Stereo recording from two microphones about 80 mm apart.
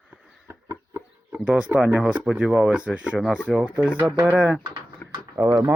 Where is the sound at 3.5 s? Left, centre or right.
Centre.